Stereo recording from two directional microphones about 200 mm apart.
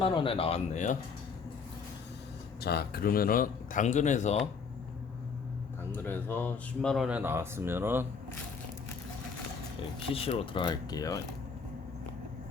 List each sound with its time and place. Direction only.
0.0 s speech: 25° left (ahead or behind)
2.6 s a man's voice: 55° left (ahead or behind); by 4.4 s 35° left (ahead or behind)
6.1 s speech: 10° left (ahead or behind); by 8.0 s 10° right (ahead or behind)
10.1 s speech: 30° left (ahead or behind)